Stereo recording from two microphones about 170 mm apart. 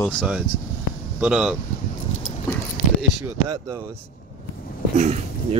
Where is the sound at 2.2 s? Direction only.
55° left (ahead or behind).